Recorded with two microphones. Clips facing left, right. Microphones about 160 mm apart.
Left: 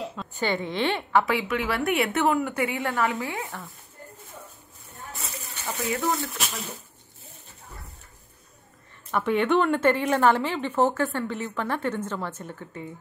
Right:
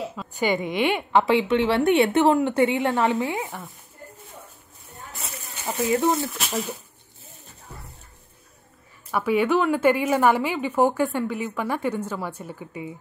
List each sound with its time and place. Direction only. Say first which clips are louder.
0.0 s speech: right 3 dB; 5° right (ahead or behind)
1.2 s a woman's voice: right 6 dB; 25° right (ahead or behind)
4.9 s a sound: even; centre (ahead or behind)
5.6 s a woman's voice: right 6 dB; 20° right (ahead or behind)
9.1 s speech: right 1 dB; 5° right (ahead or behind)